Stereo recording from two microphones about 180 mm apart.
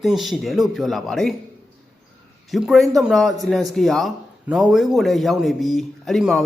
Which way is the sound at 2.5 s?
Centre (ahead or behind).